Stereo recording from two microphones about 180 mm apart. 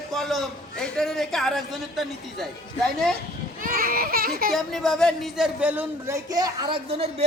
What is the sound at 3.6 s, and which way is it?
Speech, 55° right (ahead or behind).